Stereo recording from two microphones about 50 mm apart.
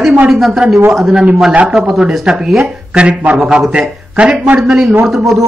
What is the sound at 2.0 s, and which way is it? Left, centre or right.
Speech, centre.